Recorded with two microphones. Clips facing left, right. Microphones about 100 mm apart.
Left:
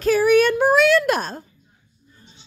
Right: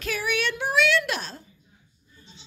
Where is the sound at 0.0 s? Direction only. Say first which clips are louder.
Left 13 dB; 40° left (ahead or behind).